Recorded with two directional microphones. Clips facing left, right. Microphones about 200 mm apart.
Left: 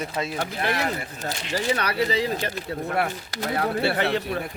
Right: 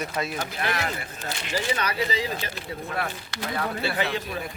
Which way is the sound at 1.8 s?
60° left (ahead or behind).